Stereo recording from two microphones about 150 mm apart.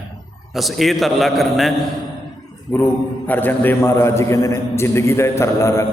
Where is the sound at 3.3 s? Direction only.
10° left (ahead or behind).